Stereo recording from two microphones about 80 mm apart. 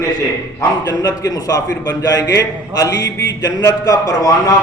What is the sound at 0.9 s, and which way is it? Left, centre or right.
A man's voice, left.